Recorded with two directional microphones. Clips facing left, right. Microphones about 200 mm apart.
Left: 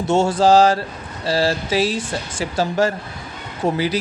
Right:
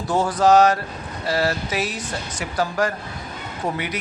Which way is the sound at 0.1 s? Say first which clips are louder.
Left 2 dB; 25° left (ahead or behind).